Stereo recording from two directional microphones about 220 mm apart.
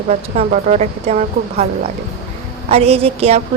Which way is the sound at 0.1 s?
30° right (ahead or behind).